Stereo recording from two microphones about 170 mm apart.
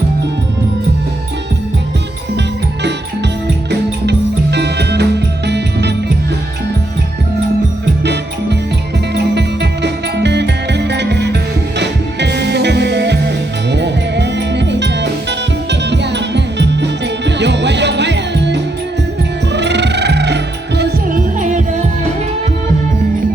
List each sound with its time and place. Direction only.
4.5 s music: 80° right
8.0 s music: 85° right
21.1 s music: 50° right (ahead or behind)